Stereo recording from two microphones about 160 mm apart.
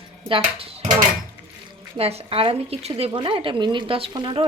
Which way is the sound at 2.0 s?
40° right (ahead or behind).